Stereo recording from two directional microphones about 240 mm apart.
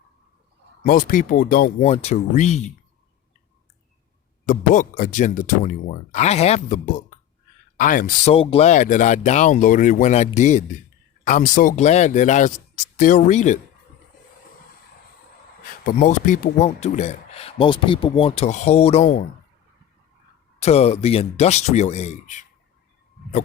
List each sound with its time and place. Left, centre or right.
0.9 s speech: left
1.9 s speech: left
4.4 s speech: left
15.8 s speech: left
20.6 s speech: left